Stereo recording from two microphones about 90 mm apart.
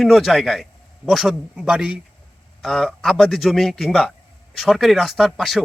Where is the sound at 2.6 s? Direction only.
5° left (ahead or behind).